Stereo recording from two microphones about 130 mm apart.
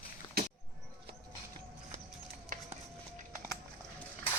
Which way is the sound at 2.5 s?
90° right.